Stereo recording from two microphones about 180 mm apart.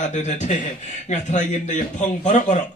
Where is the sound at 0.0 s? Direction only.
40° left (ahead or behind).